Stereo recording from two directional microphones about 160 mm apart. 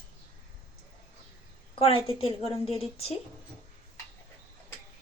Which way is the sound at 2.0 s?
35° left (ahead or behind).